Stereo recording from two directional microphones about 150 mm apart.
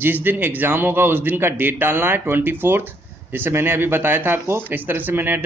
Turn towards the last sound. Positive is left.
turn(degrees=-10)  # may be behind; listen again after turning